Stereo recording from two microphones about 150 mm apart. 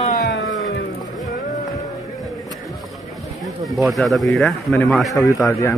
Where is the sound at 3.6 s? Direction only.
Centre (ahead or behind).